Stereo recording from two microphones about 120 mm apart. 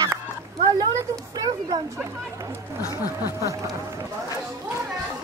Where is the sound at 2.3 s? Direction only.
25° right (ahead or behind).